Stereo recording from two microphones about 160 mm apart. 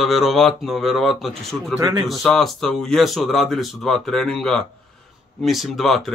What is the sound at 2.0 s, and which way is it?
Speech, centre (ahead or behind).